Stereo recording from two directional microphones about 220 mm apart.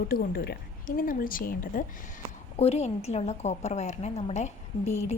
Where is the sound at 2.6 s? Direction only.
30° left (ahead or behind).